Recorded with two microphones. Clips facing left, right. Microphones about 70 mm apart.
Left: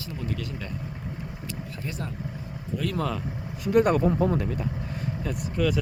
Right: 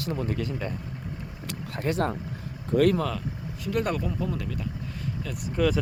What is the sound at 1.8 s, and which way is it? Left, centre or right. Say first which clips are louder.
Speech: right 11 dB; right.